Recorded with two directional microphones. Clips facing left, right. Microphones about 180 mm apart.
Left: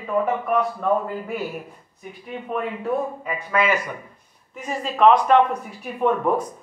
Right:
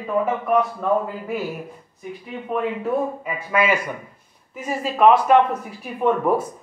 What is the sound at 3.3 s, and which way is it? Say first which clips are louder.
Speech: right 1 dB; 10° right (ahead or behind).